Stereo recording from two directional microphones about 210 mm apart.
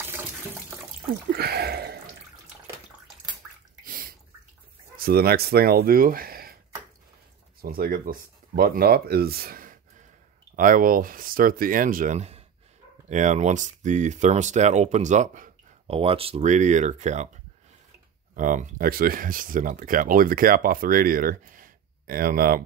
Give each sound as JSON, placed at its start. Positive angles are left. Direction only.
{"t": 1.3, "sound": "speech", "side_deg": -50}
{"t": 3.8, "sound": "bathtub", "side_deg": -40}
{"t": 4.9, "sound": "speech", "side_deg": -45}
{"t": 7.6, "sound": "speech", "side_deg": -45}
{"t": 18.3, "sound": "speech", "side_deg": -40}